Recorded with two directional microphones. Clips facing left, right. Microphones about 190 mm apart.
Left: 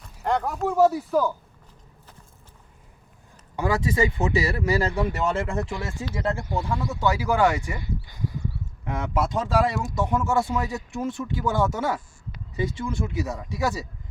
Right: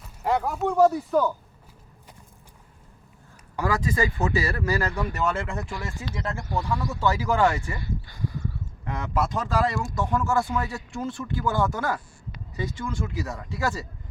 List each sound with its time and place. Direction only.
0.0 s speech: 5° right (ahead or behind)
3.5 s speech: 25° left (ahead or behind)